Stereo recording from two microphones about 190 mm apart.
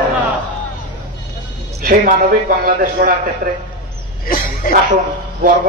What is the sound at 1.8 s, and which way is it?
A man's voice, 45° right (ahead or behind).